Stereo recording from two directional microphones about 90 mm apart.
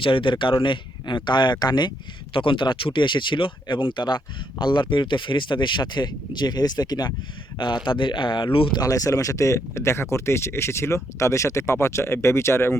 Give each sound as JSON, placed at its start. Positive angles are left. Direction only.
{"t": 0.0, "sound": "speech", "side_deg": 70}
{"t": 2.3, "sound": "speech", "side_deg": 70}
{"t": 7.9, "sound": "speech", "side_deg": 65}
{"t": 8.7, "sound": "speech", "side_deg": 40}